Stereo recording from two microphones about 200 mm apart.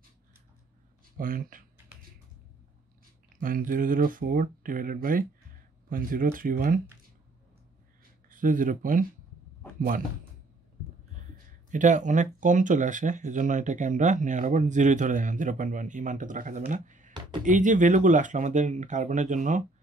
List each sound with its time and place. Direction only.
1.1 s speech: 45° right (ahead or behind)
3.3 s speech: 45° right (ahead or behind)
8.3 s a man's voice: 40° right (ahead or behind)
11.7 s speech: 40° right (ahead or behind)